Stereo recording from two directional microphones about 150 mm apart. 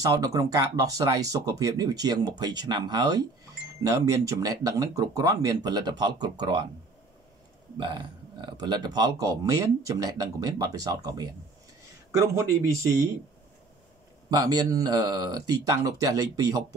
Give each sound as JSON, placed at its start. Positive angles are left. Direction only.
{"t": 0.0, "sound": "speech", "side_deg": -25}
{"t": 7.7, "sound": "speech", "side_deg": -30}
{"t": 14.3, "sound": "speech", "side_deg": -25}